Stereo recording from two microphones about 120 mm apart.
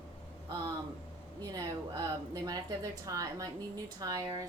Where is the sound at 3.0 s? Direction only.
30° right (ahead or behind).